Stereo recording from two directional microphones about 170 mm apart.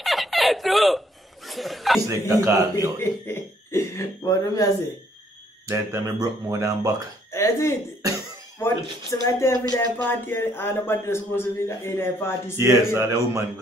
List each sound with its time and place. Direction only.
0.0 s chuckle: centre (ahead or behind)
2.0 s speech: 20° right (ahead or behind)
3.0 s speech: 15° left (ahead or behind)
5.7 s speech: 20° right (ahead or behind)
7.3 s speech: 15° left (ahead or behind)
12.5 s speech: 15° right (ahead or behind)